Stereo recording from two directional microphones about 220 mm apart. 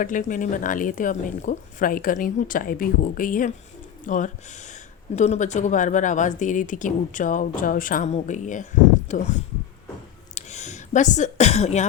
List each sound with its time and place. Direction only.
0.0 s speech: 35° left (ahead or behind)